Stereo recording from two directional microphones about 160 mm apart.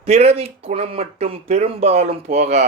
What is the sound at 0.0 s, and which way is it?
Speech, 40° right (ahead or behind).